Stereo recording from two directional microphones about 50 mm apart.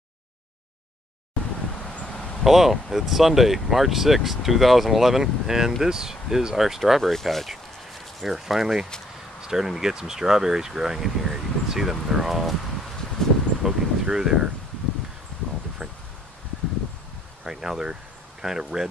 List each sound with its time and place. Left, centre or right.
1.8 s wind: left
2.4 s speech: centre
7.0 s speech: centre
13.6 s speech: centre
17.4 s speech: centre